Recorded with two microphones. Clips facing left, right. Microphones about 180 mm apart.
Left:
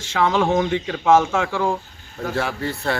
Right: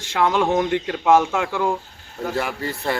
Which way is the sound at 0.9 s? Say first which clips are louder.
Left 1 dB; 15° right (ahead or behind).